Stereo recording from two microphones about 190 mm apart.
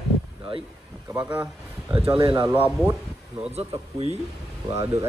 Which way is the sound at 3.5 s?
30° right (ahead or behind).